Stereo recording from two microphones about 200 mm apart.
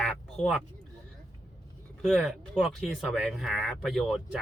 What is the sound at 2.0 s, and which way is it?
Speech, centre (ahead or behind).